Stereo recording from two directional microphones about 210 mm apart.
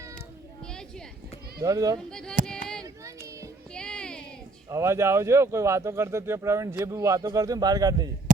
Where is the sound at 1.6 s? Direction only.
15° right (ahead or behind).